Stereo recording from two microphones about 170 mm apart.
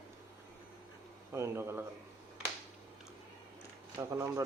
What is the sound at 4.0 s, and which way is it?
Speech, 15° right (ahead or behind).